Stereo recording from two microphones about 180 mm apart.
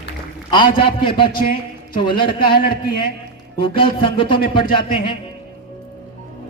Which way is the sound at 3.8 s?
30° left (ahead or behind).